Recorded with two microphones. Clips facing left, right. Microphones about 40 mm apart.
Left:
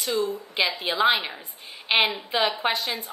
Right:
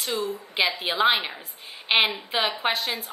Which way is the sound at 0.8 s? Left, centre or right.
Centre.